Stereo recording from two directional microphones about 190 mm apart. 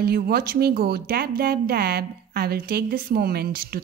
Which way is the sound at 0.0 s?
55° right (ahead or behind).